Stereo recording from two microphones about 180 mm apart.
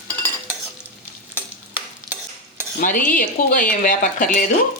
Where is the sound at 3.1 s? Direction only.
45° left (ahead or behind).